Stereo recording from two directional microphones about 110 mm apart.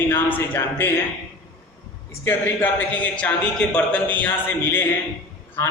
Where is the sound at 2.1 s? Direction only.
20° left (ahead or behind).